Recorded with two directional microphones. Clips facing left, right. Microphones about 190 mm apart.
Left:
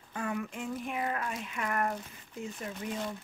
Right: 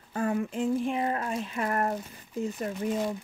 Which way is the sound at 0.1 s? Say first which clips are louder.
Right 7 dB; 35° right (ahead or behind).